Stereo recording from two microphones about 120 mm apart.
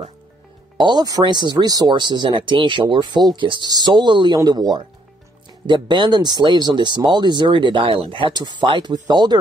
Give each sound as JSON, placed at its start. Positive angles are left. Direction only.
{"t": 0.7, "sound": "speech", "side_deg": -35}